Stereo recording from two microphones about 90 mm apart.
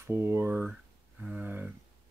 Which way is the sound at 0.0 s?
25° right (ahead or behind).